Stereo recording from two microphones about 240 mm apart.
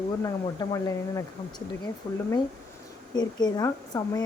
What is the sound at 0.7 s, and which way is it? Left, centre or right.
Speech, centre.